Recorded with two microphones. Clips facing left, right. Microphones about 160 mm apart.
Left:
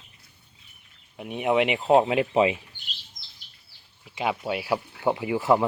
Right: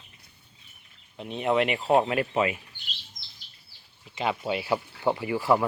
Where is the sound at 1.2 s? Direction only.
10° left (ahead or behind).